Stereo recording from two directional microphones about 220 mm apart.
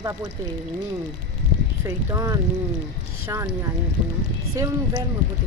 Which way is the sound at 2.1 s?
15° right (ahead or behind).